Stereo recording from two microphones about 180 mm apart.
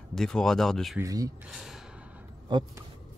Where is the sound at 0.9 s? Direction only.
20° right (ahead or behind).